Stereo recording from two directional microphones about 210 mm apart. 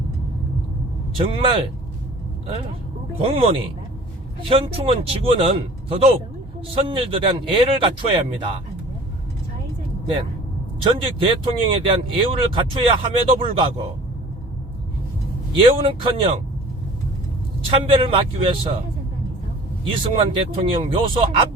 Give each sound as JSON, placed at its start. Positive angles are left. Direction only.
{"t": 1.1, "sound": "speech", "side_deg": -25}
{"t": 3.2, "sound": "speech", "side_deg": -25}
{"t": 10.8, "sound": "speech", "side_deg": -25}
{"t": 15.5, "sound": "speech", "side_deg": -25}
{"t": 17.7, "sound": "speech", "side_deg": -25}
{"t": 19.8, "sound": "speech", "side_deg": -25}